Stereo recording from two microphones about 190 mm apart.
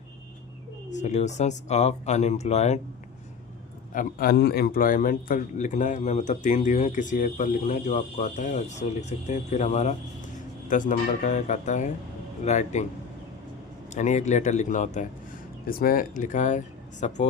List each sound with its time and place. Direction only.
0.9 s a man's voice: 40° left (ahead or behind)
3.9 s a man's voice: 50° left (ahead or behind)
13.9 s a man's voice: 40° left (ahead or behind)